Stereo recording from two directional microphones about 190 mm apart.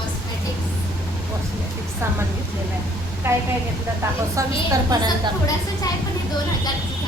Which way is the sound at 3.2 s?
10° right (ahead or behind).